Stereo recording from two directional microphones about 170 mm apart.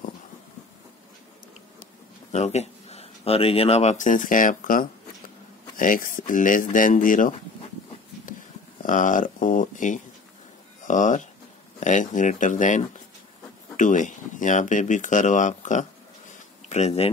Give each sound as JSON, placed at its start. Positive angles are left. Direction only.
{"t": 2.3, "sound": "speech", "side_deg": 40}
{"t": 8.8, "sound": "speech", "side_deg": 50}
{"t": 16.3, "sound": "a sound", "side_deg": 40}